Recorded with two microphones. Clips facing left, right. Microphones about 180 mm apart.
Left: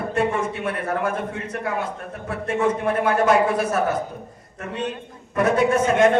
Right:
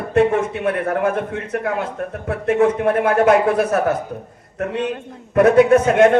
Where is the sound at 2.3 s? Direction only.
60° right (ahead or behind).